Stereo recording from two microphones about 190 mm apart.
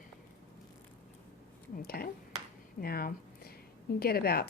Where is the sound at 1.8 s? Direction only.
50° left (ahead or behind).